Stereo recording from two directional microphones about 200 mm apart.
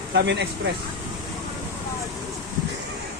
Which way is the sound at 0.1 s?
60° right (ahead or behind).